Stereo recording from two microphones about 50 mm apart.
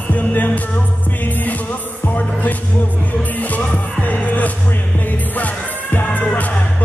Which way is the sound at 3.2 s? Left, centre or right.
Left.